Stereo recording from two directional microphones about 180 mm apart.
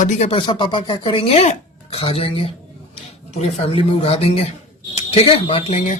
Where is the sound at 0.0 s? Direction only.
40° left (ahead or behind).